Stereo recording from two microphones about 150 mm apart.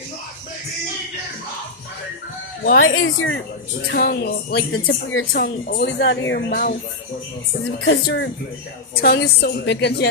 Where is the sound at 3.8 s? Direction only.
90° left.